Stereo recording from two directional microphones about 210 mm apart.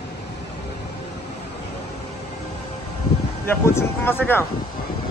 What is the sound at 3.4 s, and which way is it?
Speech, 10° left (ahead or behind).